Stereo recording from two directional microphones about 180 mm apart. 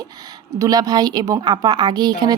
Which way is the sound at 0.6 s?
20° right (ahead or behind).